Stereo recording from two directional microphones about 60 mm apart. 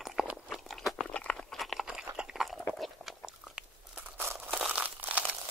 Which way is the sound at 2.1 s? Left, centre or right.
Centre.